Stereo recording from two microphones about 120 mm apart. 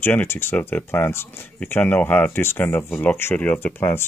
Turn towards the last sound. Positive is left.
turn(degrees=15)  # may be behind; listen again after turning